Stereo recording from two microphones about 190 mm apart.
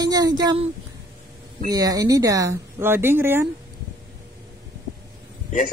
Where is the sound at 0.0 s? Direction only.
20° right (ahead or behind).